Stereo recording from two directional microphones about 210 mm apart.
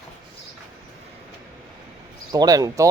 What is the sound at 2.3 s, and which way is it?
Speech, 15° right (ahead or behind).